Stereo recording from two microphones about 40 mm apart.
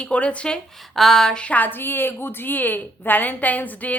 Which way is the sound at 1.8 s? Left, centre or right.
Left.